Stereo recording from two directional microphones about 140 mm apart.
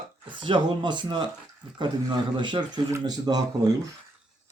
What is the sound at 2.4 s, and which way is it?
Speech, 35° right (ahead or behind).